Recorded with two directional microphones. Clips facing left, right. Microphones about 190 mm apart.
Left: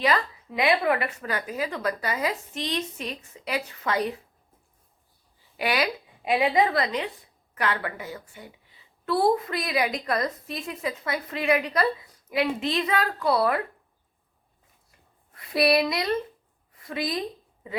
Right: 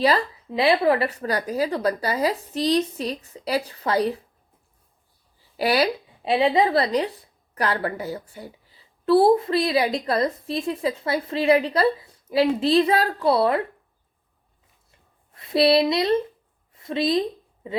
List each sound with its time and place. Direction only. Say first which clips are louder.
0.0 s a woman's voice: right 4 dB; 30° right (ahead or behind)
5.5 s a woman's voice: right 5 dB; 35° right (ahead or behind)
15.4 s speech: right 4 dB; 25° right (ahead or behind)
16.7 s a sound: right 8 dB; 25° right (ahead or behind)